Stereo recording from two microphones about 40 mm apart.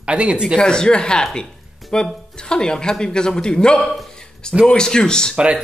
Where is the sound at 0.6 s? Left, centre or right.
Centre.